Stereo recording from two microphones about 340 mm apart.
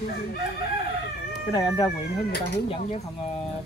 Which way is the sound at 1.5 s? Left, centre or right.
Centre.